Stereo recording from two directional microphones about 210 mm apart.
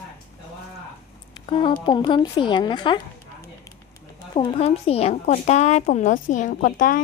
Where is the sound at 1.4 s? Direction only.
25° left (ahead or behind).